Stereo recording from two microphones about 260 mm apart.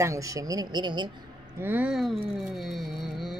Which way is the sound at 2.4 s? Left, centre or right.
Centre.